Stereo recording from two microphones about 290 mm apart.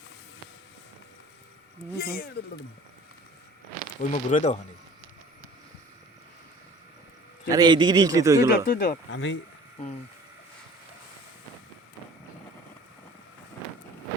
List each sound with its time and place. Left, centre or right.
2.0 s speech: left
4.0 s speech: left
7.4 s a man's voice: centre
8.6 s speech: left